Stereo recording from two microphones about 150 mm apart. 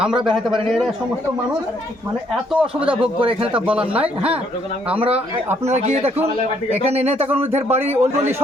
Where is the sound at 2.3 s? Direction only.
5° right (ahead or behind).